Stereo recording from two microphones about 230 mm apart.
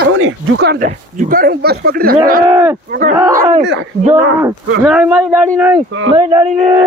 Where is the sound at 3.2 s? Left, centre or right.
Centre.